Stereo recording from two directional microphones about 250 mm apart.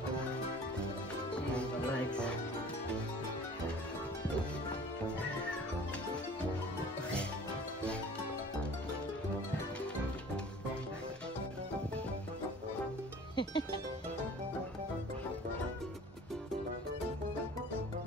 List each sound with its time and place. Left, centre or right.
1.6 s music: centre
13.4 s music: centre